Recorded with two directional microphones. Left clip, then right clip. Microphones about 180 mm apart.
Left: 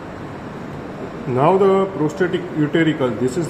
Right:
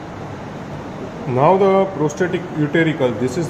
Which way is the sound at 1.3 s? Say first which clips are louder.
Right 1 dB; 10° right (ahead or behind).